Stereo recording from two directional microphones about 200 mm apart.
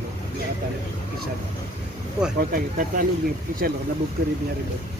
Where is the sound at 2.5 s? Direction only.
45° right (ahead or behind).